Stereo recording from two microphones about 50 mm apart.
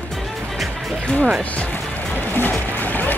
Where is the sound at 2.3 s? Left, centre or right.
Left.